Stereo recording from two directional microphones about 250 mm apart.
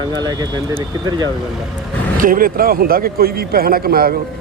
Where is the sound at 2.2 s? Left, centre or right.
Right.